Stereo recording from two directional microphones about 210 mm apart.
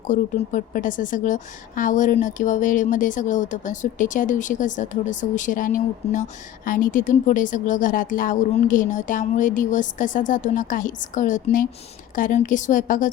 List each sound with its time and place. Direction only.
0.1 s a woman's voice: 40° left (ahead or behind)